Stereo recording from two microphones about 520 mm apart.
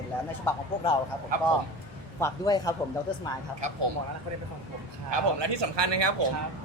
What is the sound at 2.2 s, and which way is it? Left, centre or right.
Speech, centre.